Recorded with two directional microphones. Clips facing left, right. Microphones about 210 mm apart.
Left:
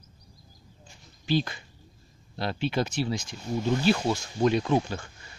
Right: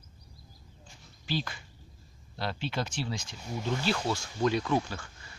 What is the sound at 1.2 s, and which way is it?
Speech, 20° left (ahead or behind).